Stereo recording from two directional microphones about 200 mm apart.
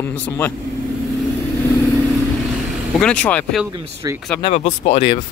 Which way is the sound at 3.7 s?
15° right (ahead or behind).